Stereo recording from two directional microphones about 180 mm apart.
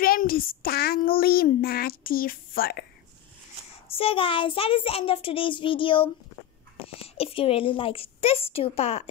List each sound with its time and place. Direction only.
0.0 s a child's voice: 55° left (ahead or behind)
3.9 s a child's voice: 30° left (ahead or behind)